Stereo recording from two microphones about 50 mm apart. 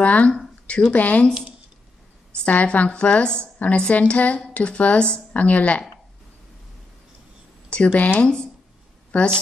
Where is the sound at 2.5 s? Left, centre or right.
Left.